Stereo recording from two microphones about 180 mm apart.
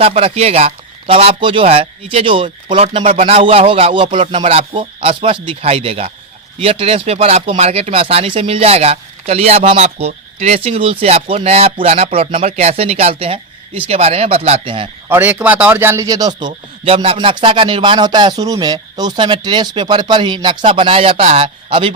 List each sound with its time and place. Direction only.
0.0 s speech: 30° right (ahead or behind)
15.1 s speech: 10° right (ahead or behind)
16.8 s speech: 30° right (ahead or behind)